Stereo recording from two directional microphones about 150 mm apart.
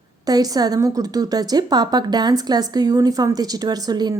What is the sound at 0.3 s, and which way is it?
A woman's voice, 25° right (ahead or behind).